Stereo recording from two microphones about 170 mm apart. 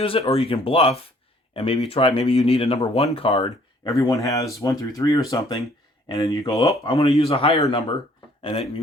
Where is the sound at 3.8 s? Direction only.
20° left (ahead or behind).